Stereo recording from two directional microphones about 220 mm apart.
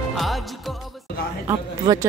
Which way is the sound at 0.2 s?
Centre (ahead or behind).